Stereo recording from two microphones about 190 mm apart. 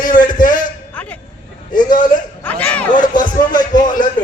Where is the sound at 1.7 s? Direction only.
45° left (ahead or behind).